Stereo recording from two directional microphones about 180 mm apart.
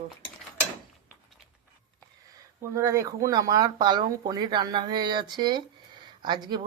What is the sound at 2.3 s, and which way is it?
Speech, 15° right (ahead or behind).